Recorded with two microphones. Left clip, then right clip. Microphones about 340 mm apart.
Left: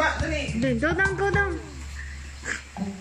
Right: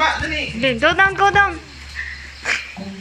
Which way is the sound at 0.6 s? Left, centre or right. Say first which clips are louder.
Right 10 dB; right.